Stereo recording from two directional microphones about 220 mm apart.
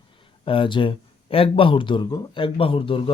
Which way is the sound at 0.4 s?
25° left (ahead or behind).